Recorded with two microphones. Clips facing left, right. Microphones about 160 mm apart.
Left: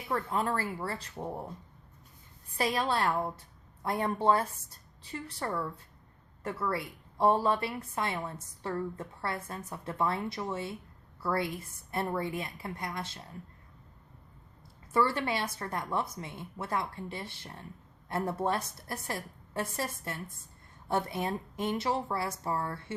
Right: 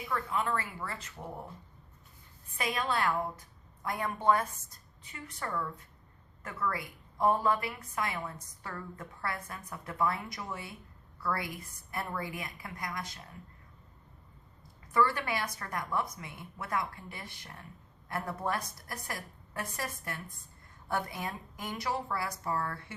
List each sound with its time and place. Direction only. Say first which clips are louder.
0.1 s a woman's voice: left 2 dB; 35° left (ahead or behind)
2.6 s a woman's voice: left 3 dB; 35° left (ahead or behind)
14.9 s a woman's voice: left 1 dB; 25° left (ahead or behind)